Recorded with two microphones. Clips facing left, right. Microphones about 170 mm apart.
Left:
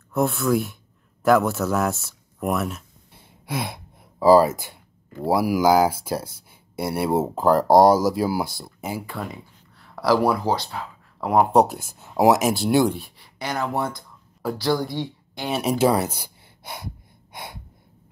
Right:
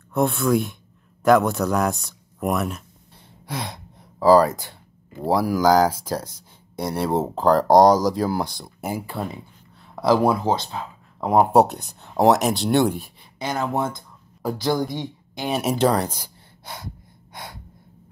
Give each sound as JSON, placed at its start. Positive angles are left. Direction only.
{"t": 0.1, "sound": "speech", "side_deg": 0}
{"t": 9.0, "sound": "speech", "side_deg": -25}
{"t": 11.5, "sound": "speech", "side_deg": 0}
{"t": 13.4, "sound": "speech", "side_deg": -20}
{"t": 15.5, "sound": "speech", "side_deg": 0}
{"t": 15.9, "sound": "gasp", "side_deg": 10}